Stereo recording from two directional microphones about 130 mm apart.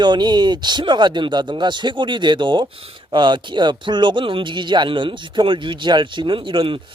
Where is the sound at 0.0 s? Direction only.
35° right (ahead or behind).